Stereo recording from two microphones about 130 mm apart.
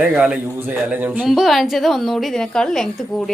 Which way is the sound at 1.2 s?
Centre (ahead or behind).